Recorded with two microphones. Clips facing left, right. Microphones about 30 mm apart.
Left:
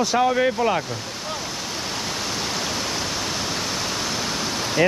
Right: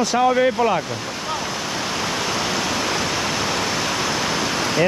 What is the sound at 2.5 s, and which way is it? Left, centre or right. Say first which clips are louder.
Pink noise: right 4 dB; right.